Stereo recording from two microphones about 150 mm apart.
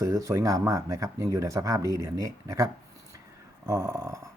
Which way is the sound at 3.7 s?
20° right (ahead or behind).